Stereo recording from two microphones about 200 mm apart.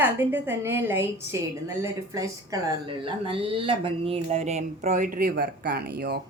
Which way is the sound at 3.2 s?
25° right (ahead or behind).